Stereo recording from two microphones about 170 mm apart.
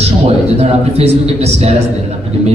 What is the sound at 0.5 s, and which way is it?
A man's voice, 35° right (ahead or behind).